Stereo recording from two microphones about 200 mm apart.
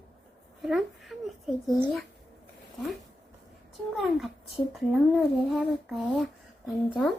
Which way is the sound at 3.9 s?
Centre (ahead or behind).